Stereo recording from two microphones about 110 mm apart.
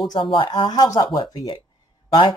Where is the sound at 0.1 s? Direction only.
45° left (ahead or behind).